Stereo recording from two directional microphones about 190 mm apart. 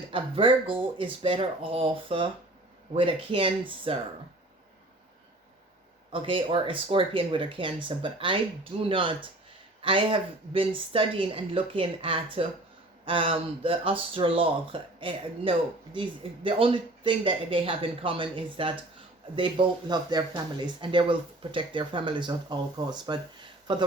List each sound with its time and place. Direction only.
0.1 s speech: 25° right (ahead or behind)
6.1 s speech: 25° right (ahead or behind)